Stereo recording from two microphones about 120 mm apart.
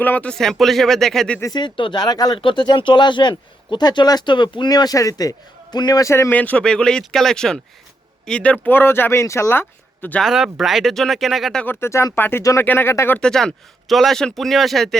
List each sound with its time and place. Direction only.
0.0 s speech: 15° left (ahead or behind)
1.4 s speech: 35° left (ahead or behind)
6.3 s speech: 10° left (ahead or behind)
10.2 s speech: 5° right (ahead or behind)
11.6 s speech: 20° left (ahead or behind)
13.1 s speech: 5° left (ahead or behind)